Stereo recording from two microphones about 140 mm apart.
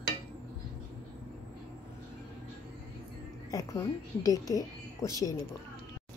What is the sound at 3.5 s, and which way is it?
Speech, 25° left (ahead or behind).